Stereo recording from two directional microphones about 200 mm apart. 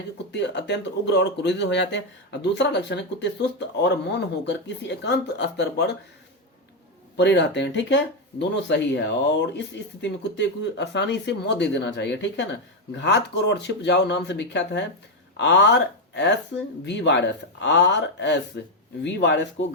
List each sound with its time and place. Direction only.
0.3 s speech: 60° left (ahead or behind)
7.2 s speech: 60° left (ahead or behind)